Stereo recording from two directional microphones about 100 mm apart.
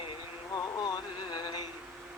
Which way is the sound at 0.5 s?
45° left (ahead or behind).